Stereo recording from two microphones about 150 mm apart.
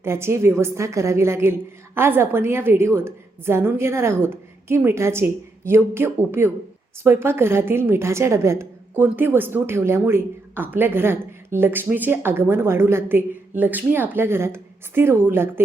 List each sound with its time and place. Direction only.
0.0 s a woman's voice: 15° right (ahead or behind)